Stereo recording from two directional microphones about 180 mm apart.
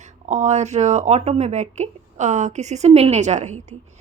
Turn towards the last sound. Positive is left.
turn(degrees=-40)  # may be behind; listen again after turning